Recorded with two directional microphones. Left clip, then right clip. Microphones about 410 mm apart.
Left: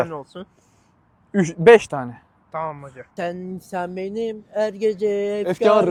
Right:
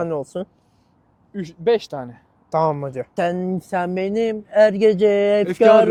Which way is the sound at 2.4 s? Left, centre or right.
Right.